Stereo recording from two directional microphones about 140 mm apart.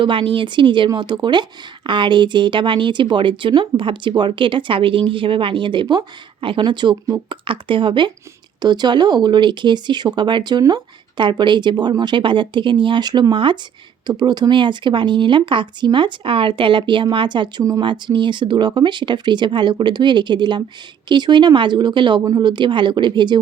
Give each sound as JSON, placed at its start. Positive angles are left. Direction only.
{"t": 0.0, "sound": "speech", "side_deg": -35}